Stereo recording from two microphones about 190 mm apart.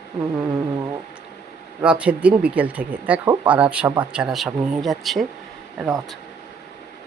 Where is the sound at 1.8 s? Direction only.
5° right (ahead or behind).